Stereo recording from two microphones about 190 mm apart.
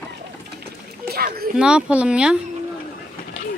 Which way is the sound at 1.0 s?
50° right (ahead or behind).